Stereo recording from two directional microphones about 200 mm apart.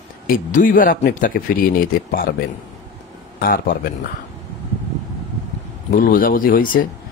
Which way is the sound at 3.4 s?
45° left (ahead or behind).